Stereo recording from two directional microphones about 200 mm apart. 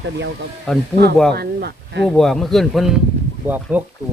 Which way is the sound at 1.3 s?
50° right (ahead or behind).